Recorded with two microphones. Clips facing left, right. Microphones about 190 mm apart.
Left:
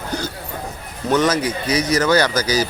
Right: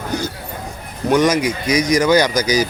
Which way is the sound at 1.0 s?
10° right (ahead or behind).